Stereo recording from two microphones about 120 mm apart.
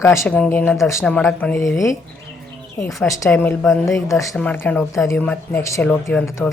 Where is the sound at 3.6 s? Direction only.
Centre (ahead or behind).